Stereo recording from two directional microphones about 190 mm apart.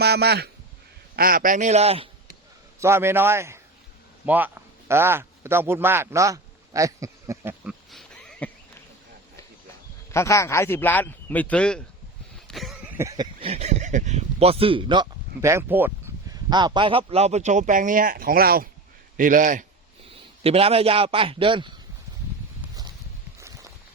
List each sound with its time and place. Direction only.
0.0 s speech: 55° right (ahead or behind); by 2.0 s 30° right (ahead or behind)
2.8 s a man's voice: 15° right (ahead or behind)
4.3 s a sound: 10° right (ahead or behind)
10.1 s a man's voice: 15° left (ahead or behind)
12.5 s a sound: centre (ahead or behind)
13.4 s speech: 35° right (ahead or behind)
15.4 s a man's voice: 15° right (ahead or behind); by 19.6 s 45° right (ahead or behind)
20.4 s a man's voice: 30° right (ahead or behind)
23.4 s a sound: 15° right (ahead or behind)